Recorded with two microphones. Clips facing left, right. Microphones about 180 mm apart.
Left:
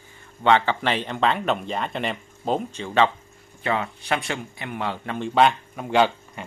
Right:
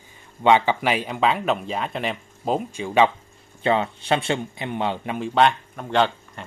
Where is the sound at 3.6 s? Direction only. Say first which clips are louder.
Right 4 dB; 25° right (ahead or behind).